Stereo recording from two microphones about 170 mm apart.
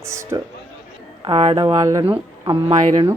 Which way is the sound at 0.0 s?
15° right (ahead or behind).